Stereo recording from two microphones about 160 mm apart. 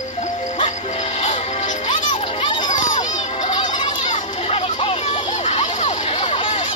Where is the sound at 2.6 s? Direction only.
50° left (ahead or behind).